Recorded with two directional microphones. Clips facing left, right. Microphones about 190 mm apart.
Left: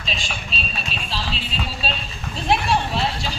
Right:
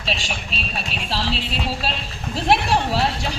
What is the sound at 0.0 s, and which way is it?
Speech, 70° right (ahead or behind).